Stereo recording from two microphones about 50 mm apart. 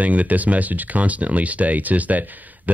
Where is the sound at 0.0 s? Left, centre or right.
Right.